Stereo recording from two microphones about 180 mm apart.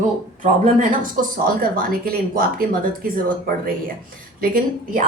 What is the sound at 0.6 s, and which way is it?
Speech, 45° right (ahead or behind).